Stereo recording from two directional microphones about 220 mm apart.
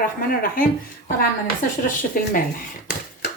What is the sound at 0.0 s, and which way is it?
A woman's voice, 40° left (ahead or behind).